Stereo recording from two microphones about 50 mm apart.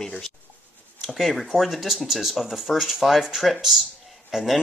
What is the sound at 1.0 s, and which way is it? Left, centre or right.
Speech, centre.